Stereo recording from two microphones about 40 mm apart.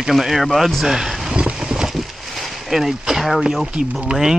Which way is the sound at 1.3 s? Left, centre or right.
Right.